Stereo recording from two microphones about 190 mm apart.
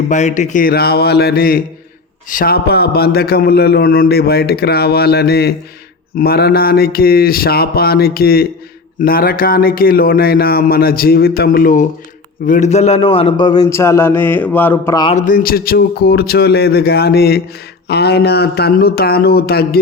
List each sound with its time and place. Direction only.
0.1 s a man's voice: 40° left (ahead or behind); by 15.0 s 10° left (ahead or behind)
15.0 s a man's voice: 40° left (ahead or behind)